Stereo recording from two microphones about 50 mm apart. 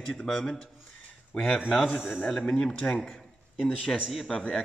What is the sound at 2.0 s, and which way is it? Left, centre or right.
Speech, centre.